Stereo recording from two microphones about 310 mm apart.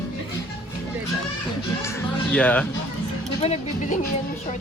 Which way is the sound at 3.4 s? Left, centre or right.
Centre.